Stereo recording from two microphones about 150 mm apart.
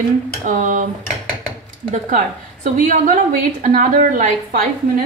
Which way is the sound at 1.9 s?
55° right (ahead or behind).